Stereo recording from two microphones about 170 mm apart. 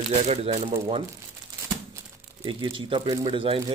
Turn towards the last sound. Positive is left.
turn(degrees=-30)  # may be behind; listen again after turning